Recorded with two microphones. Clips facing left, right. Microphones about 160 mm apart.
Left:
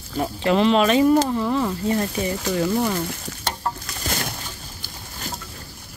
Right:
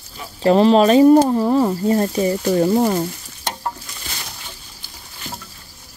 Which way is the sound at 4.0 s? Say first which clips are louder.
Left 9 dB; 60° left (ahead or behind).